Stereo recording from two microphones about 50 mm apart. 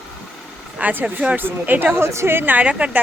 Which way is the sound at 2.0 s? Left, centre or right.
Right.